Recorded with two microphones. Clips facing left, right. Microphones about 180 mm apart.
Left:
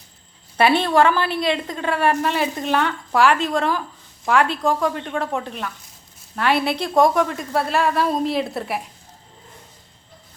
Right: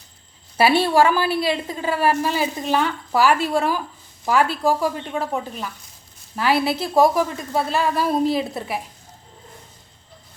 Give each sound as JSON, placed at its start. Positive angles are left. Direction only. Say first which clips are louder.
{"t": 0.5, "sound": "a woman's voice", "louder": "even", "side_deg": -5}